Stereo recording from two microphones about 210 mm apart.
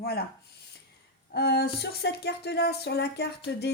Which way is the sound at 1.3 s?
50° left (ahead or behind).